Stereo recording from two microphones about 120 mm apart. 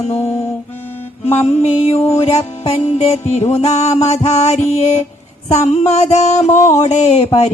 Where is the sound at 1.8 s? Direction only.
60° left (ahead or behind).